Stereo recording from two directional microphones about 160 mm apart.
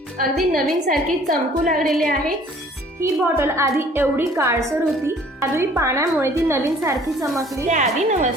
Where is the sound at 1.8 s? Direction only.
Centre (ahead or behind).